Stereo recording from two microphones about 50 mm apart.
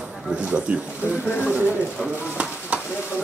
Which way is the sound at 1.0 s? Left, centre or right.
Left.